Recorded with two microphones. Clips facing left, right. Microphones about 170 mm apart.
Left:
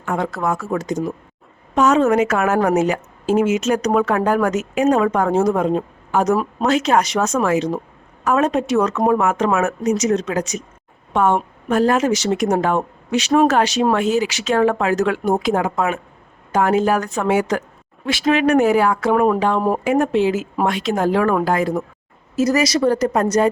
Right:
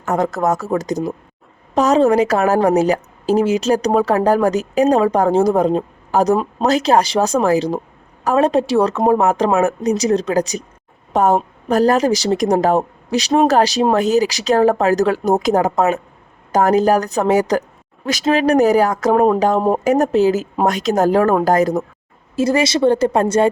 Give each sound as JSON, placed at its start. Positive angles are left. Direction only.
{"t": 0.0, "sound": "a woman's voice", "side_deg": -40}
{"t": 22.4, "sound": "speech", "side_deg": -30}